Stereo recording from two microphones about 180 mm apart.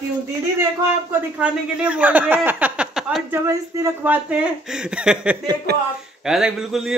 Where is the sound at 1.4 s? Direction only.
5° right (ahead or behind).